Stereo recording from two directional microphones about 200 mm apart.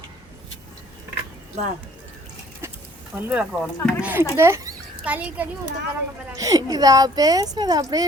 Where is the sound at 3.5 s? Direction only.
Centre (ahead or behind).